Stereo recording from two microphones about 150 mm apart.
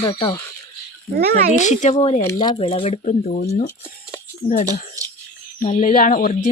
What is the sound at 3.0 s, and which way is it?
Speech, 55° left (ahead or behind).